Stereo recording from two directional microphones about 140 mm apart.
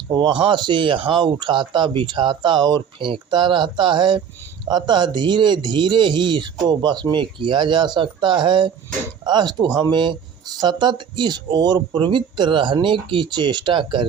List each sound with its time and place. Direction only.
0.1 s speech: 35° right (ahead or behind)